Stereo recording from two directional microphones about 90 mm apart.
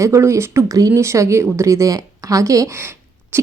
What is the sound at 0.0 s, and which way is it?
Speech, 35° right (ahead or behind).